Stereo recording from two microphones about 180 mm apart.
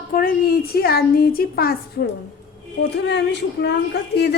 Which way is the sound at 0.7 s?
60° left (ahead or behind).